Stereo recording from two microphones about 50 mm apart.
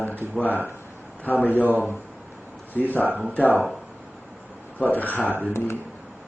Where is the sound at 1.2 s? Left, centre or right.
Left.